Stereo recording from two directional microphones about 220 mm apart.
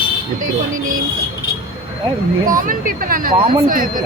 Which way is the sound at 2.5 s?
40° right (ahead or behind).